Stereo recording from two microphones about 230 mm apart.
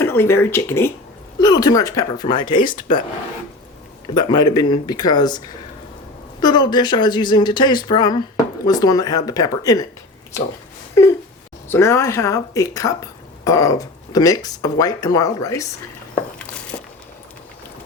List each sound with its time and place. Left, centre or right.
0.0 s speech: centre
2.6 s speech: left
4.1 s speech: centre
6.4 s speech: centre
11.0 s speech: centre